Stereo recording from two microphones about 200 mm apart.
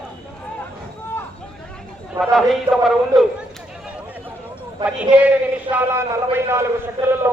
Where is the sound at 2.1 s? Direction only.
Centre (ahead or behind).